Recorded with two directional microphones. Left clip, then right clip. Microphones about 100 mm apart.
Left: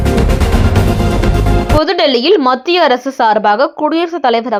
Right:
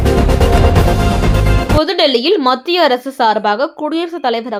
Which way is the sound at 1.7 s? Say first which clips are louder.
Left 1 dB; 30° left (ahead or behind).